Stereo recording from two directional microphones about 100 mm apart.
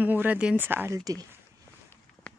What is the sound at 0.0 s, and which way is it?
Speech, 15° right (ahead or behind).